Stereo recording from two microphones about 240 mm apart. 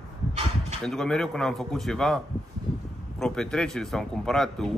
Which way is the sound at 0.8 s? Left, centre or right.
Centre.